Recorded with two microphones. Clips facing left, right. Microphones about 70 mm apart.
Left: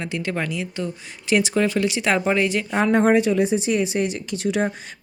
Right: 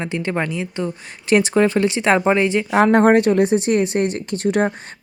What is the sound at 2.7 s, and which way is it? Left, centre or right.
Speech, right.